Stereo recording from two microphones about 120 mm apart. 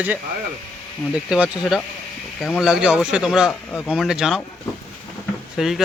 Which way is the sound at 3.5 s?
15° left (ahead or behind).